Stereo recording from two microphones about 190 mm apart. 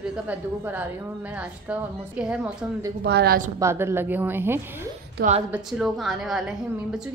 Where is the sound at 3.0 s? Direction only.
60° right (ahead or behind).